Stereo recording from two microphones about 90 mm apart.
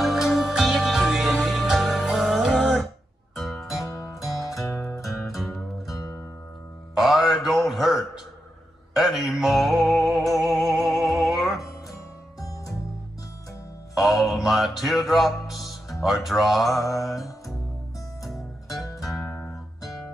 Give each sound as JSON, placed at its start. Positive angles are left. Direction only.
{"t": 0.0, "sound": "music", "side_deg": 0}
{"t": 4.5, "sound": "music", "side_deg": 35}
{"t": 5.4, "sound": "music", "side_deg": 0}
{"t": 7.0, "sound": "a sound", "side_deg": -5}
{"t": 8.9, "sound": "music", "side_deg": 0}
{"t": 13.9, "sound": "music", "side_deg": 0}